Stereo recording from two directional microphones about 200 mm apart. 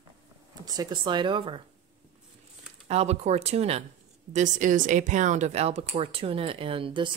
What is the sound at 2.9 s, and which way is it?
Speech, 30° right (ahead or behind).